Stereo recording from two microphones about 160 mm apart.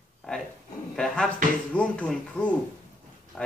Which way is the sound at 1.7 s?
5° left (ahead or behind).